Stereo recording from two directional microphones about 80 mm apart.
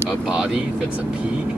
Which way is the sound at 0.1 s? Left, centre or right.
Centre.